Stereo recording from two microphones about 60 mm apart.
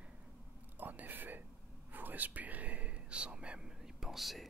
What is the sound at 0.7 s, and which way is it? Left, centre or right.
Whispering, right.